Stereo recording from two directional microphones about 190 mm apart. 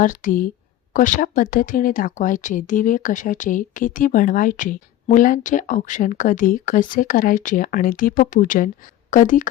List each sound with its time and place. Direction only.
0.0 s speech: 45° left (ahead or behind)